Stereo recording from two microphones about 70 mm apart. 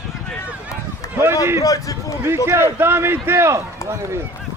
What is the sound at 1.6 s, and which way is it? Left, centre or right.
Speech, left.